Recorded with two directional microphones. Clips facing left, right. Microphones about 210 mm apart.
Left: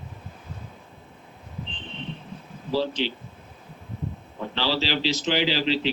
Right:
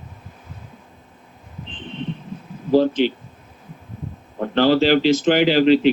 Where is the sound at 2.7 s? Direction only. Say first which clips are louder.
Right 10 dB; 50° right (ahead or behind).